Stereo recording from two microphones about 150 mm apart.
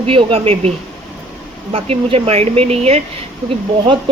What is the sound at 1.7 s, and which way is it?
Speech, 40° right (ahead or behind).